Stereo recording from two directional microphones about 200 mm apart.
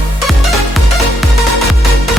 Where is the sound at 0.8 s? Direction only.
Centre (ahead or behind).